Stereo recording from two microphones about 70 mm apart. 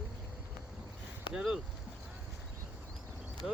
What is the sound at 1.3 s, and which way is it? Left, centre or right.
Speech, centre.